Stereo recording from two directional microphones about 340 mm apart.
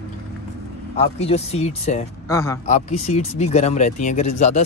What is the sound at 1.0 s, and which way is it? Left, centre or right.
Speech, centre.